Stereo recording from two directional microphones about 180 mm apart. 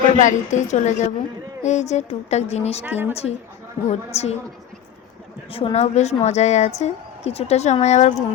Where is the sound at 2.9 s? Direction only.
10° right (ahead or behind).